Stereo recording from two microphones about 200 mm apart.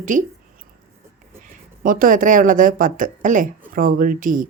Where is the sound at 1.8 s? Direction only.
45° right (ahead or behind).